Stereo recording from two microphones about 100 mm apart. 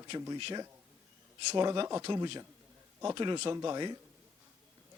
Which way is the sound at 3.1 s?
50° right (ahead or behind).